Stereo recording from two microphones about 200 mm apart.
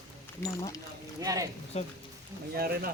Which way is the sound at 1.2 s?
15° right (ahead or behind).